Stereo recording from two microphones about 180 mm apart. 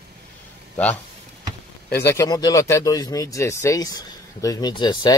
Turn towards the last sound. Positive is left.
turn(degrees=25)  # may be behind; listen again after turning